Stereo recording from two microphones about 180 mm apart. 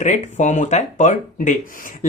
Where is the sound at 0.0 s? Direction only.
40° left (ahead or behind).